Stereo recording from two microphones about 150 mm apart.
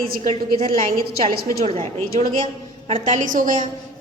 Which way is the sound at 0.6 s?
75° right (ahead or behind).